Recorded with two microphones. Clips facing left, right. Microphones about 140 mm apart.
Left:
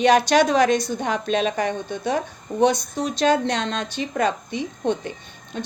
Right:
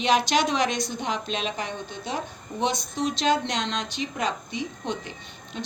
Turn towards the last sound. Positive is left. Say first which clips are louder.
# left 4 dB
turn(degrees=50)  # may be behind; listen again after turning